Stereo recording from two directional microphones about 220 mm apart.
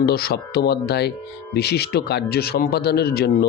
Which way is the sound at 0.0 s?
45° left (ahead or behind).